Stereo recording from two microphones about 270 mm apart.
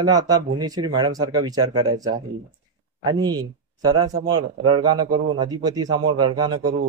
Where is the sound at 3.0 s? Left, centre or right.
Centre.